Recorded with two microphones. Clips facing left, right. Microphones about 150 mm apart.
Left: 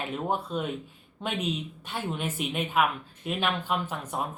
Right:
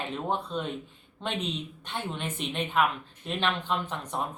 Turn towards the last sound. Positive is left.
turn(degrees=5)  # may be behind; listen again after turning